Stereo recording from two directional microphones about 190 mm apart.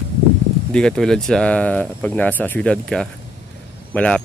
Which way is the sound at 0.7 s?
5° left (ahead or behind).